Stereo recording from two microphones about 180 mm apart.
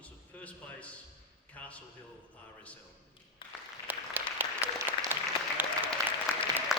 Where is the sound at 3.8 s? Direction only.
10° right (ahead or behind).